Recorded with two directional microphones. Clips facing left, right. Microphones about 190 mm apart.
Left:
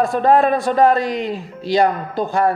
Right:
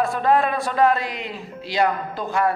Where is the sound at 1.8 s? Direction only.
40° left (ahead or behind).